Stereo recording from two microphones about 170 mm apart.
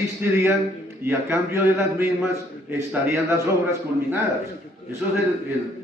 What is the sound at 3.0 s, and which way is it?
Speech, 15° right (ahead or behind).